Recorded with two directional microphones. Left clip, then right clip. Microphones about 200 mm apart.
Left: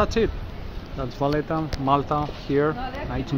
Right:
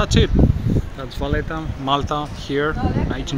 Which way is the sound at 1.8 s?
Centre (ahead or behind).